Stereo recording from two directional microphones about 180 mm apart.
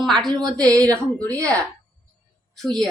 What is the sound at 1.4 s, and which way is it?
Speech, 15° right (ahead or behind).